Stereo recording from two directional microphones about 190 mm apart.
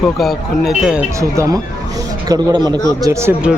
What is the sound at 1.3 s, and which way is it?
A man's voice, 15° right (ahead or behind).